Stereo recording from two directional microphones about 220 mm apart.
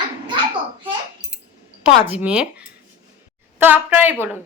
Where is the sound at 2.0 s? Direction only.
5° right (ahead or behind).